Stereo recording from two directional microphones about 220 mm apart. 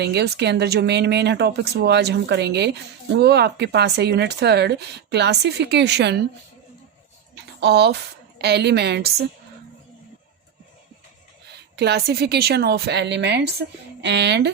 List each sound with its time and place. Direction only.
0.0 s speech: 50° right (ahead or behind)
7.6 s speech: 50° right (ahead or behind)
11.8 s speech: 45° right (ahead or behind)